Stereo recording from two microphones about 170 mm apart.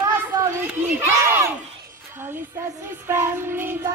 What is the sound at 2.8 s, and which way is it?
Music, 15° right (ahead or behind).